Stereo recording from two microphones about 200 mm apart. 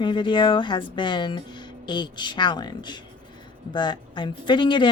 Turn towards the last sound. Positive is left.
turn(degrees=25)  # may be behind; listen again after turning